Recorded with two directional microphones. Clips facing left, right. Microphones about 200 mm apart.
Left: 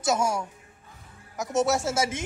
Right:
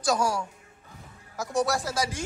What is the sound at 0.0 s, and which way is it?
A man's voice, 20° left (ahead or behind).